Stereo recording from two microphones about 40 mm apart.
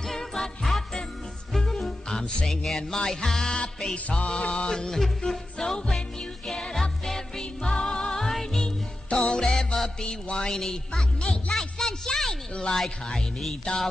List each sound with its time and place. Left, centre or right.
0.0 s jingle bell: centre
1.6 s music: centre
4.6 s speech: centre
5.3 s music: centre
8.6 s music: centre
10.5 s speech: centre
11.5 s a sound: centre
12.7 s speech: centre